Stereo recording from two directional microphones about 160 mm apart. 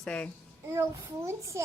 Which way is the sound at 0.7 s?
15° right (ahead or behind).